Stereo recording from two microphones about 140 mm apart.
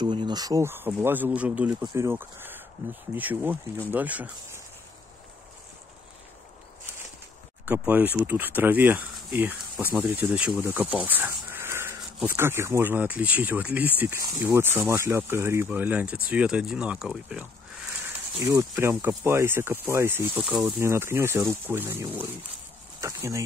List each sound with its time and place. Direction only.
0.0 s speech: 35° right (ahead or behind); by 4.3 s 10° right (ahead or behind)
7.6 s speech: 10° right (ahead or behind)
18.5 s speech: 20° right (ahead or behind)
20.4 s speech: centre (ahead or behind)
20.8 s speech: 20° right (ahead or behind)